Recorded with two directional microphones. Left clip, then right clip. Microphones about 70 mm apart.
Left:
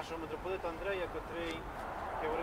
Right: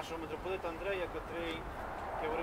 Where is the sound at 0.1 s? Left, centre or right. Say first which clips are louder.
Even; centre.